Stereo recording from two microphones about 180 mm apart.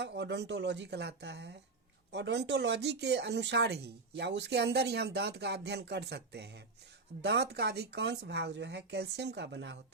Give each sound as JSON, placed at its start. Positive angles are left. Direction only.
{"t": 0.0, "sound": "speech", "side_deg": -70}